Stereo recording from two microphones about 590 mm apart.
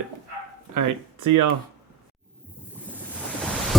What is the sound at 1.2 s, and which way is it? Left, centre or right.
Speech, right.